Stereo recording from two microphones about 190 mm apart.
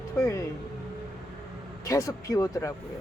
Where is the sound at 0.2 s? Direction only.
15° left (ahead or behind).